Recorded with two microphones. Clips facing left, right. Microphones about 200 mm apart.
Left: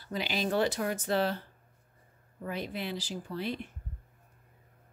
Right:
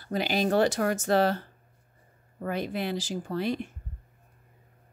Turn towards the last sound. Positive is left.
turn(degrees=-80)